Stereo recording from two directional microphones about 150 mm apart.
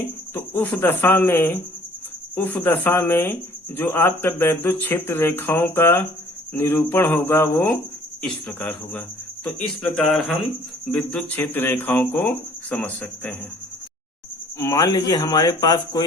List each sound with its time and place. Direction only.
0.3 s speech: 15° left (ahead or behind)
14.6 s speech: 20° left (ahead or behind)